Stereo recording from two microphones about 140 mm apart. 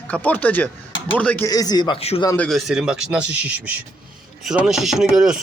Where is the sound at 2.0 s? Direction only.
45° left (ahead or behind).